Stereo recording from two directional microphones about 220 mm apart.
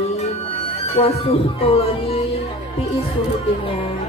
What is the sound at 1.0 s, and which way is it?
A woman's voice, 30° left (ahead or behind).